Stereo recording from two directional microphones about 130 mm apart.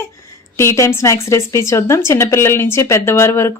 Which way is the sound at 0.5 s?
25° left (ahead or behind).